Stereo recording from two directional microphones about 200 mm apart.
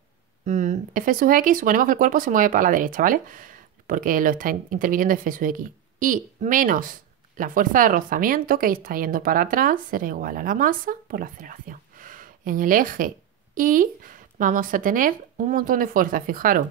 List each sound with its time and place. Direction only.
0.5 s speech: 40° right (ahead or behind)